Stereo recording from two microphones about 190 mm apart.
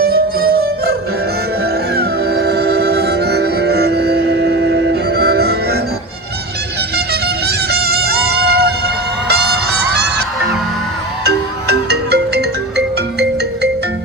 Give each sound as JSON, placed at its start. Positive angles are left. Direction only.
{"t": 0.0, "sound": "music", "side_deg": -55}
{"t": 2.0, "sound": "music", "side_deg": -60}
{"t": 6.9, "sound": "music", "side_deg": -60}
{"t": 11.3, "sound": "music", "side_deg": -60}